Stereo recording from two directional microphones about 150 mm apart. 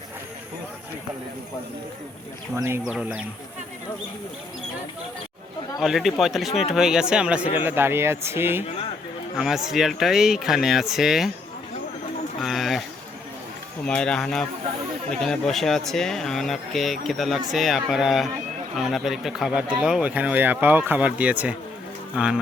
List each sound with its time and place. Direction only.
2.6 s speech: 15° right (ahead or behind)
2.8 s speech: 5° right (ahead or behind)
5.8 s speech: centre (ahead or behind)
9.4 s speech: 5° right (ahead or behind)
12.4 s speech: centre (ahead or behind)
13.8 s speech: 5° left (ahead or behind)